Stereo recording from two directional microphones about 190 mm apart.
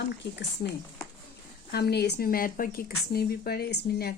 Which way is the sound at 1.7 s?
60° left (ahead or behind).